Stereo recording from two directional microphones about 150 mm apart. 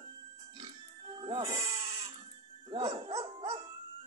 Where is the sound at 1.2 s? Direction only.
35° right (ahead or behind).